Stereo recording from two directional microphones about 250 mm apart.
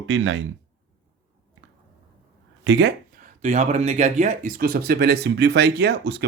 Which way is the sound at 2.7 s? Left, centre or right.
Right.